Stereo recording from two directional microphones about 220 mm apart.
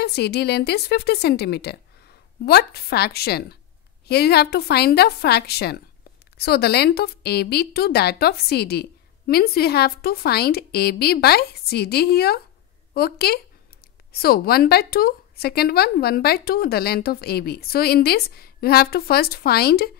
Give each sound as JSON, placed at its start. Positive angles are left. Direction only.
{"t": 0.0, "sound": "a woman's voice", "side_deg": 50}